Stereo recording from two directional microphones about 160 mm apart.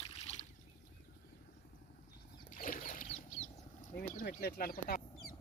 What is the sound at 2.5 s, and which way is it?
Boat, 60° left (ahead or behind).